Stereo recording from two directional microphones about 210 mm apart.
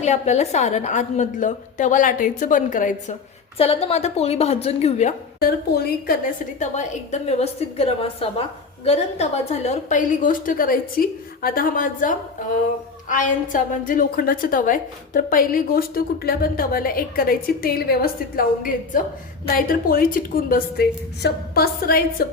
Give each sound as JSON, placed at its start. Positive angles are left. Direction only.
{"t": 0.0, "sound": "a woman's voice", "side_deg": 30}
{"t": 3.6, "sound": "a woman's voice", "side_deg": 30}
{"t": 5.4, "sound": "a woman's voice", "side_deg": 45}
{"t": 6.6, "sound": "a woman's voice", "side_deg": 35}